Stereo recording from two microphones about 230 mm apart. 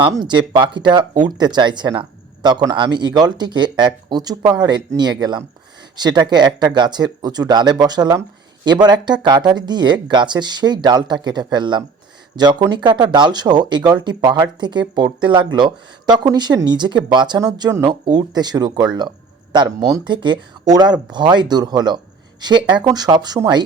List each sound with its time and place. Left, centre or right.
0.0 s speech: centre